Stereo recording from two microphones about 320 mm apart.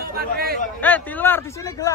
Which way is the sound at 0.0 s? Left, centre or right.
Right.